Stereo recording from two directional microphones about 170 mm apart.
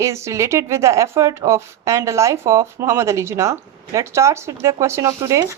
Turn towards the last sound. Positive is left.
turn(degrees=-15)  # may be behind; listen again after turning